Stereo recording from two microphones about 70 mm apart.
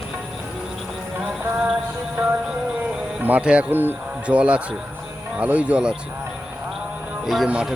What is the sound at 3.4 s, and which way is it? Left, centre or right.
Speech, centre.